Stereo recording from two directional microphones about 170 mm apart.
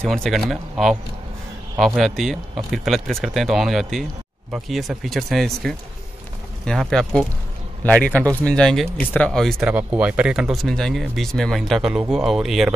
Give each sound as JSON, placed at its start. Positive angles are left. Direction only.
{"t": 0.0, "sound": "speech", "side_deg": 5}
{"t": 2.0, "sound": "a man's voice", "side_deg": 0}